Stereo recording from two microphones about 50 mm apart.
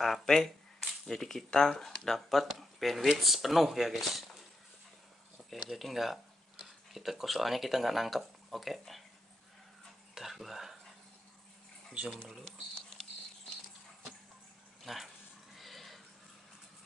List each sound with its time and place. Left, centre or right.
0.0 s shuffling cards: centre
0.7 s speech: centre
5.5 s speech: centre
10.1 s a sound: centre
12.4 s patter: centre
14.8 s a sound: centre